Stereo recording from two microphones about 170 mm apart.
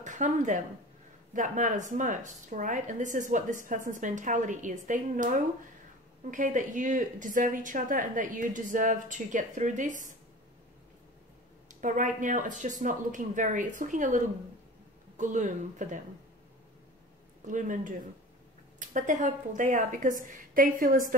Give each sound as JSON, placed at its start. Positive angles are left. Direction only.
{"t": 0.0, "sound": "speech", "side_deg": -45}
{"t": 11.8, "sound": "speech", "side_deg": -50}
{"t": 17.5, "sound": "speech", "side_deg": -50}